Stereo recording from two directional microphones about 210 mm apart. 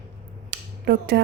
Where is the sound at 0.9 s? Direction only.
50° right (ahead or behind).